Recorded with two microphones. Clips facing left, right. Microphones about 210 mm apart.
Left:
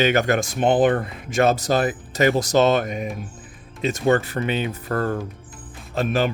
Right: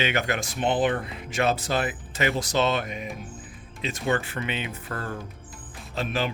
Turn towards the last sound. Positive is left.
turn(degrees=45)  # may be behind; listen again after turning